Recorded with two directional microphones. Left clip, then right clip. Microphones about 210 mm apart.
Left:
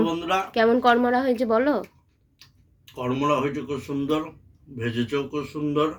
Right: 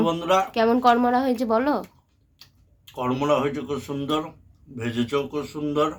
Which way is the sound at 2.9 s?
20° right (ahead or behind).